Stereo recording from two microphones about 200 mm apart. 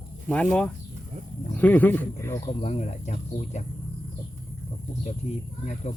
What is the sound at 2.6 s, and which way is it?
Speech, 35° left (ahead or behind).